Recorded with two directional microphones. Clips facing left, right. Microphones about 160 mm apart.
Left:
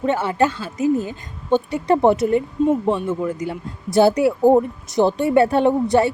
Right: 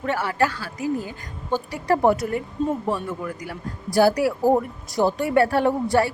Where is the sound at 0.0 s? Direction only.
20° left (ahead or behind).